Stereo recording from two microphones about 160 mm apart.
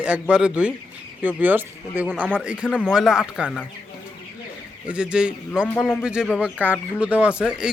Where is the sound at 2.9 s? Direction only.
5° right (ahead or behind).